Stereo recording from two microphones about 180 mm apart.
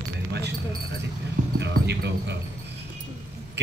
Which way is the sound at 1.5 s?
70° right (ahead or behind).